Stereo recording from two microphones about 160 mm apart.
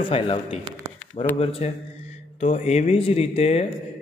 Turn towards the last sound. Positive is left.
turn(degrees=40)  # may be behind; listen again after turning